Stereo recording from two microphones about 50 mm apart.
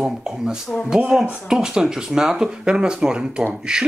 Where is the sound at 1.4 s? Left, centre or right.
Centre.